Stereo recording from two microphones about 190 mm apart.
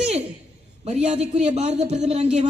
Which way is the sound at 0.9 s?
35° right (ahead or behind).